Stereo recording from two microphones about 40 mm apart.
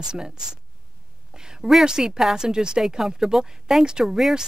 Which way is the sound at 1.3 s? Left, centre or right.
Centre.